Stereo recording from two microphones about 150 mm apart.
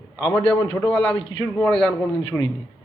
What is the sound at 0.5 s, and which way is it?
Speech, 30° left (ahead or behind).